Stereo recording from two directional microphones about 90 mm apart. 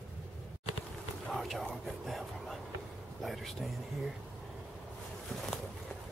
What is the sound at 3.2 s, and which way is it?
Speech, centre (ahead or behind).